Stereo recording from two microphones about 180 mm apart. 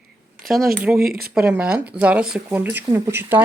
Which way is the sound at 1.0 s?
55° right (ahead or behind).